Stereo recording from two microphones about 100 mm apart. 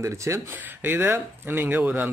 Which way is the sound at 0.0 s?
30° right (ahead or behind).